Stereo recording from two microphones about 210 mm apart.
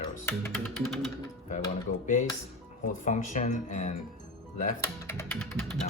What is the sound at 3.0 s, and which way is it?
Speech, 35° left (ahead or behind).